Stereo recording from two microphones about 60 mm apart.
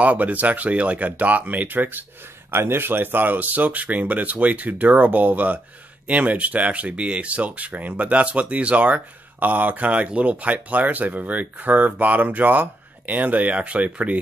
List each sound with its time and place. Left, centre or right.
0.0 s speech: right